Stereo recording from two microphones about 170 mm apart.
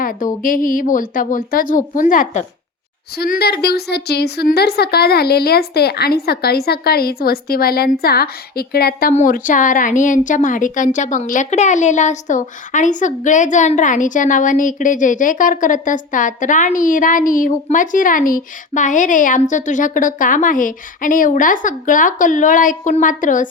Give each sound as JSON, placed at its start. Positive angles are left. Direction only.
{"t": 0.0, "sound": "a woman's voice", "side_deg": 55}
{"t": 3.2, "sound": "a woman's voice", "side_deg": 65}